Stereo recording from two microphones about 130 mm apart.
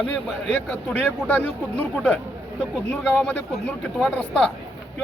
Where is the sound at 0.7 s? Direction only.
10° left (ahead or behind).